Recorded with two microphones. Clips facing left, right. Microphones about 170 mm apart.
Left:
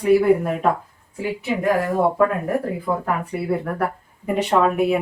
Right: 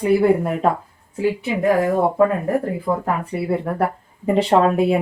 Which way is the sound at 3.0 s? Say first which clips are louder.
Right 1 dB; 30° right (ahead or behind).